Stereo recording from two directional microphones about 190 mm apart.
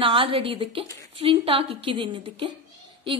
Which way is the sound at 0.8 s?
15° left (ahead or behind).